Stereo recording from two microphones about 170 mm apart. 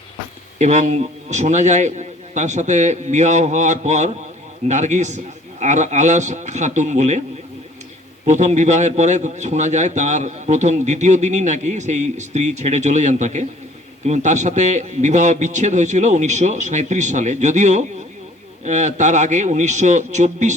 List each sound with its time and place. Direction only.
0.6 s a man's voice: 45° right (ahead or behind)
8.2 s a man's voice: 45° right (ahead or behind)